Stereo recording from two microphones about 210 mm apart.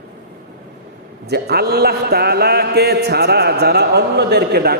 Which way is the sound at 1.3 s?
50° right (ahead or behind).